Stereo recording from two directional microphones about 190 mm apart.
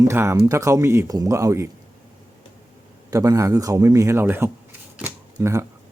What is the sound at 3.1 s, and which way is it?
Speech, 15° right (ahead or behind).